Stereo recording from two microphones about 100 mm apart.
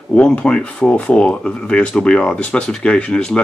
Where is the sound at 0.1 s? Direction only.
10° left (ahead or behind).